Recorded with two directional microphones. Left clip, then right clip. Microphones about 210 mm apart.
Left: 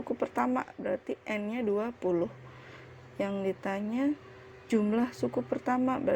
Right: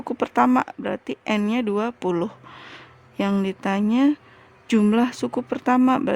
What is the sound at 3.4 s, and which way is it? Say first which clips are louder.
A woman's voice: right 8 dB; 25° right (ahead or behind).